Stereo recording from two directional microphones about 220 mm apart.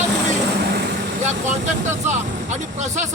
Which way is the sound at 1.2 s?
30° right (ahead or behind).